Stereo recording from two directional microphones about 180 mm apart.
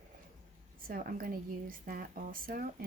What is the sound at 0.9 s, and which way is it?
Speech, 50° right (ahead or behind).